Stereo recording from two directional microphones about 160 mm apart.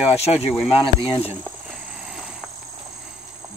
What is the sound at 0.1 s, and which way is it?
Speech, 40° left (ahead or behind).